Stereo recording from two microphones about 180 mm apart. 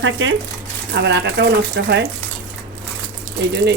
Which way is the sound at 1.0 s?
75° right (ahead or behind).